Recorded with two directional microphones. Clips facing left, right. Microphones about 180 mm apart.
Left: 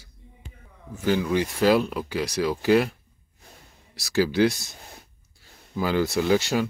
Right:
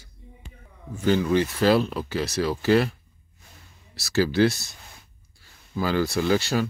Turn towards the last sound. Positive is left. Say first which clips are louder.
# left 1 dB
turn(degrees=15)  # may be behind; listen again after turning